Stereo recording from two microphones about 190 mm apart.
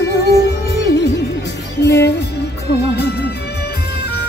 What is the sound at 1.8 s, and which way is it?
Music, 65° left (ahead or behind).